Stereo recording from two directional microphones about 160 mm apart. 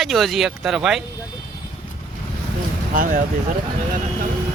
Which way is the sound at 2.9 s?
60° right (ahead or behind).